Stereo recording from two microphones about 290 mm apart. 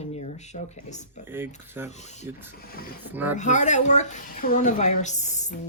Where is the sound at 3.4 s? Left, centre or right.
Left.